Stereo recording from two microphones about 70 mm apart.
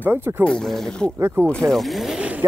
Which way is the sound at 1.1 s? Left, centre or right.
Right.